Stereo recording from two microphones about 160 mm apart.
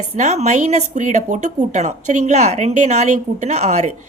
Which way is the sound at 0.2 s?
45° right (ahead or behind).